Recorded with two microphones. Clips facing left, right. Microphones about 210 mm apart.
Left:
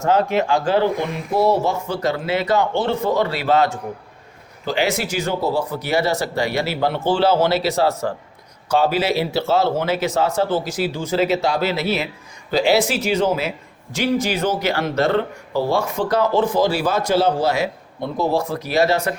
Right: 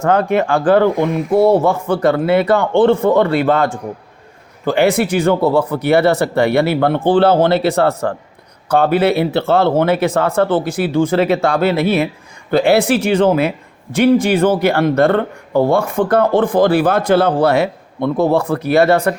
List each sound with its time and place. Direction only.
0.0 s speech: 55° right (ahead or behind)